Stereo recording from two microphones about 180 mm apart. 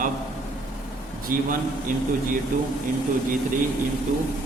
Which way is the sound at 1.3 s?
50° right (ahead or behind).